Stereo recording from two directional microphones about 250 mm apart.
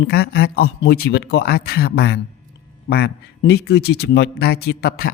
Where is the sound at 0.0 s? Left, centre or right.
Left.